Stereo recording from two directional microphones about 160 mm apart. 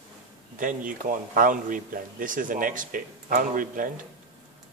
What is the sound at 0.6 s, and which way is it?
Speech, 60° right (ahead or behind).